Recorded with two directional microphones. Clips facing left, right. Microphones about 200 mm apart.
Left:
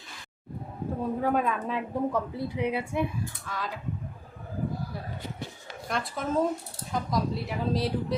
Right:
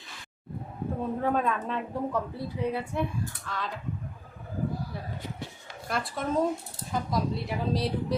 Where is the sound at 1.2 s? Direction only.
5° left (ahead or behind).